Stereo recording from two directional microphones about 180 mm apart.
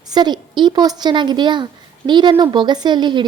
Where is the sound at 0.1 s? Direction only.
25° right (ahead or behind).